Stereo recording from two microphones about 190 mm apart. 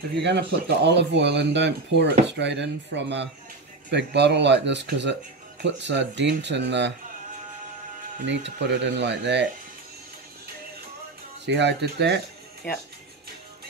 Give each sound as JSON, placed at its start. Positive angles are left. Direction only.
{"t": 0.1, "sound": "speech", "side_deg": -65}
{"t": 8.3, "sound": "speech", "side_deg": -65}
{"t": 11.4, "sound": "speech", "side_deg": -65}